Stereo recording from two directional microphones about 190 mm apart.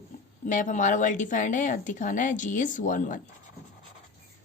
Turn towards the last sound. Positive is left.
turn(degrees=45)  # may be behind; listen again after turning